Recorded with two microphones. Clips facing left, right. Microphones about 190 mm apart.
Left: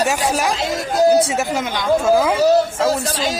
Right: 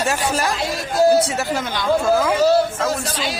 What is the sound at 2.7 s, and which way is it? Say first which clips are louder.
Speech: left 4 dB; 35° left (ahead or behind).